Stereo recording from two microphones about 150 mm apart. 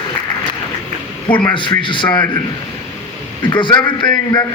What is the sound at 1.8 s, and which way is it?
Speech, 30° left (ahead or behind).